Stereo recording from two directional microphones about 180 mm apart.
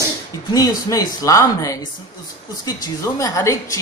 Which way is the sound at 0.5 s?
20° left (ahead or behind).